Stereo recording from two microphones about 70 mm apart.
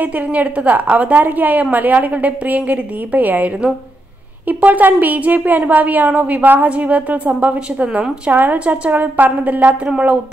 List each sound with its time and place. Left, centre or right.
0.0 s a woman's voice: right